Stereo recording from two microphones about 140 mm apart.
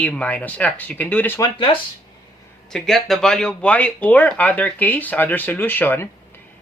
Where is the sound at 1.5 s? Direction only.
40° left (ahead or behind).